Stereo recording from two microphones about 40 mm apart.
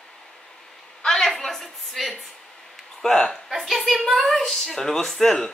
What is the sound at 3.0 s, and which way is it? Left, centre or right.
Speech, centre.